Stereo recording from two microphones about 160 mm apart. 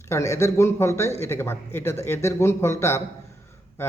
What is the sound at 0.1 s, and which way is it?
Speech, 20° left (ahead or behind).